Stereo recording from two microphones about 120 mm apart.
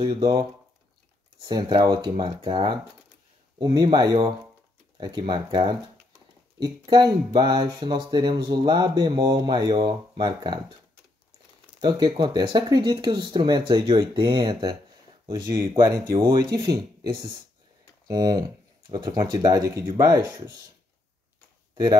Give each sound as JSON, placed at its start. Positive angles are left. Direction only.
{"t": 0.0, "sound": "speech", "side_deg": -35}
{"t": 6.6, "sound": "speech", "side_deg": -35}
{"t": 11.8, "sound": "speech", "side_deg": -35}
{"t": 15.2, "sound": "speech", "side_deg": -25}